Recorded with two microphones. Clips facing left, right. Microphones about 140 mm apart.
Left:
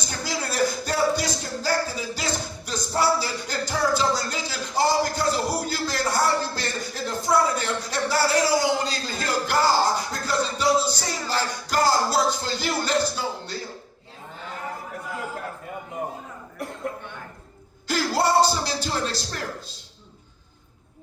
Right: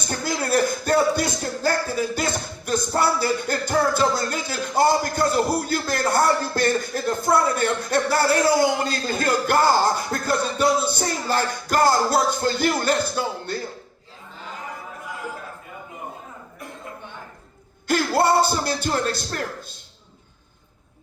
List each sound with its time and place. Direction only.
0.0 s music: 50° right (ahead or behind)
17.8 s speech: 55° right (ahead or behind)